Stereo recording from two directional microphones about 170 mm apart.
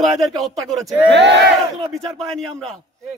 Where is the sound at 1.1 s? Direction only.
90° right.